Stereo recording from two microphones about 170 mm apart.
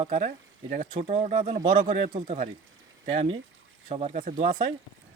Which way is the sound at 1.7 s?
45° right (ahead or behind).